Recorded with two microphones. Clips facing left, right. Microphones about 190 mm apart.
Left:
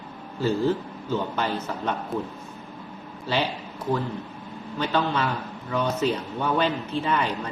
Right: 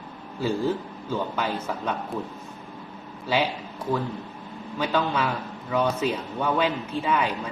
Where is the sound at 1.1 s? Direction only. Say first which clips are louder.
Left 1 dB; 10° right (ahead or behind).